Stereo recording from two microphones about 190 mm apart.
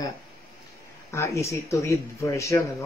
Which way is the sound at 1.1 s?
15° left (ahead or behind).